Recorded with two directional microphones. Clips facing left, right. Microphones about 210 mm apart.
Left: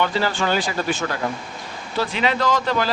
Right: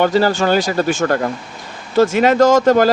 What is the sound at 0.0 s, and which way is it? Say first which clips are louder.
Speech: right 8 dB; 40° right (ahead or behind).